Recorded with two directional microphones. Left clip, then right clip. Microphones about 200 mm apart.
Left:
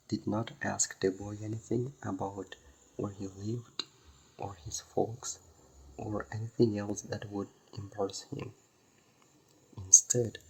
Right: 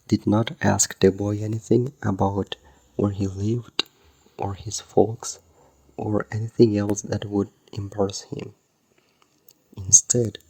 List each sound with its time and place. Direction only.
0.1 s speech: 40° right (ahead or behind)
9.7 s speech: 35° right (ahead or behind)